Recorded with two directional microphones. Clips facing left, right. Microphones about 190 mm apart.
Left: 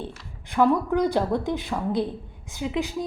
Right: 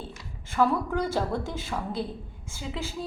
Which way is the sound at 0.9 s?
15° left (ahead or behind).